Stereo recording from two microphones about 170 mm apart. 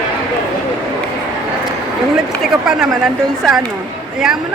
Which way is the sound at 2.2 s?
5° right (ahead or behind).